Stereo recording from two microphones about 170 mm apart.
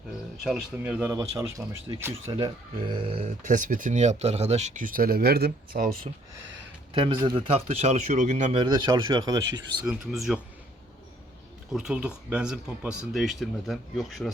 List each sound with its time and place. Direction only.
0.4 s speech: 5° right (ahead or behind)
1.4 s speech: 20° right (ahead or behind)
2.2 s speech: 30° right (ahead or behind); by 5.9 s 60° right (ahead or behind)
7.0 s speech: 30° right (ahead or behind); by 8.5 s 45° right (ahead or behind)
8.5 s speech: 25° right (ahead or behind)
9.8 s speech: 5° right (ahead or behind)
11.7 s speech: 5° right (ahead or behind)